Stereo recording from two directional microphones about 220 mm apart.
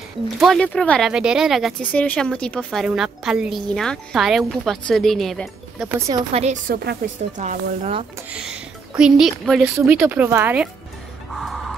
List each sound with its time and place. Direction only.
0.4 s speech: centre (ahead or behind)
5.9 s speech: 15° right (ahead or behind)
6.3 s speech: 30° right (ahead or behind)
6.7 s speech: 45° right (ahead or behind)
8.3 s a woman's voice: 5° right (ahead or behind)